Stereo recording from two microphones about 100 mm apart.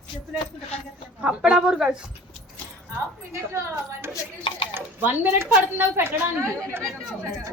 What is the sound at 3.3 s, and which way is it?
A woman's voice, 25° right (ahead or behind).